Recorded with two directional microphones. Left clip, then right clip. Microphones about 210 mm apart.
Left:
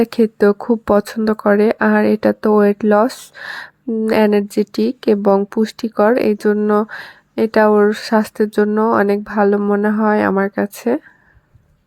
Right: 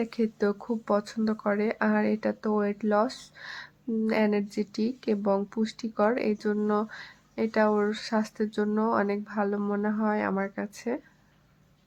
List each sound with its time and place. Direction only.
0.0 s speech: 40° left (ahead or behind)